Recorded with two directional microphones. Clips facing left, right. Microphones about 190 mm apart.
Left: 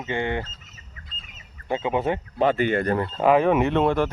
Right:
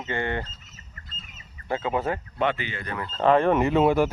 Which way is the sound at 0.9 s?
Centre (ahead or behind).